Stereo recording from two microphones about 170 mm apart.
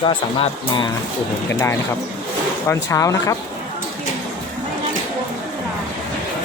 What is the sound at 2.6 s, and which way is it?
Speech, 20° left (ahead or behind).